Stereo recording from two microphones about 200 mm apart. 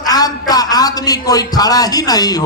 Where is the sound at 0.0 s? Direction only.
20° left (ahead or behind).